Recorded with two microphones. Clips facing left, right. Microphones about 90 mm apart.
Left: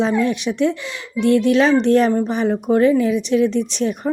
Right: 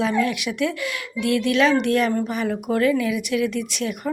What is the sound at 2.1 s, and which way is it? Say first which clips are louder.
Speech: left 5 dB; 20° left (ahead or behind).